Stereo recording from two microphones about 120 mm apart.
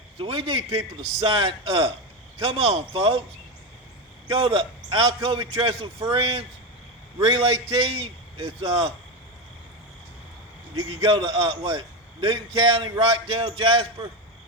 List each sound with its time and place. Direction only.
0.2 s a man's voice: 50° right (ahead or behind)
4.3 s a man's voice: 50° right (ahead or behind)
10.8 s a man's voice: 40° right (ahead or behind)